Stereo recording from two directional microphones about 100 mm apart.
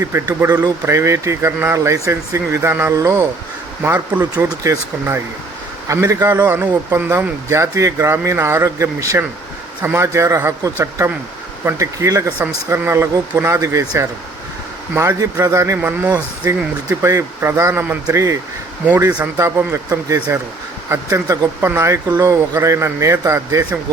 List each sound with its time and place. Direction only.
0.1 s a man's voice: 35° right (ahead or behind)
3.8 s a man's voice: 20° right (ahead or behind)
4.4 s a man's voice: 35° right (ahead or behind)
15.8 s a man's voice: 20° right (ahead or behind)
16.1 s speech: 45° right (ahead or behind)
16.9 s a man's voice: 30° right (ahead or behind)